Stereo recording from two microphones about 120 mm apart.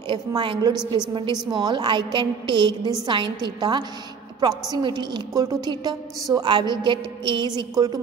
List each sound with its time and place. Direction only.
0.4 s a woman's voice: 40° right (ahead or behind)